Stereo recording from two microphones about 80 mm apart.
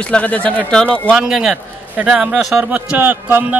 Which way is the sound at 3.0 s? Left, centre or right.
Right.